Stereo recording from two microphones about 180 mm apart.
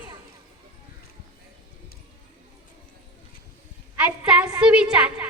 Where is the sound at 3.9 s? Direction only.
5° right (ahead or behind).